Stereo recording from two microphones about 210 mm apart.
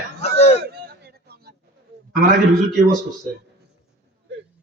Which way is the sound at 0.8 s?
50° right (ahead or behind).